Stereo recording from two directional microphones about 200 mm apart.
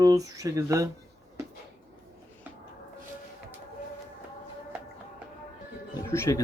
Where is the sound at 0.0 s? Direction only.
15° right (ahead or behind).